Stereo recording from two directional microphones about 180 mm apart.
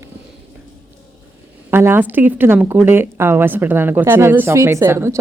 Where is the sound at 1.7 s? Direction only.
15° right (ahead or behind).